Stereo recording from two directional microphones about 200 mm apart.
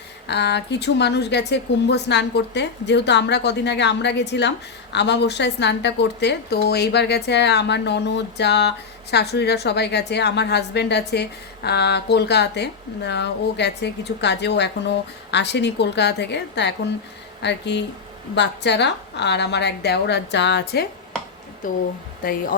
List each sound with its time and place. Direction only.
0.3 s a woman's voice: 60° left (ahead or behind)
22.2 s speech: 45° left (ahead or behind)